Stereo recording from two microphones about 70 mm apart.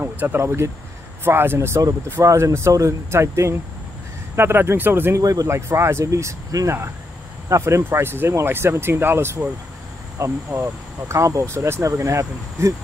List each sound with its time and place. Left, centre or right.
0.0 s speech: right
2.2 s speech: right
5.2 s speech: right
5.5 s speech: right
10.1 s speech: right